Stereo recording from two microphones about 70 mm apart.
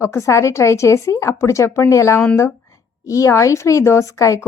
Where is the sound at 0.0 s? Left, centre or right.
Left.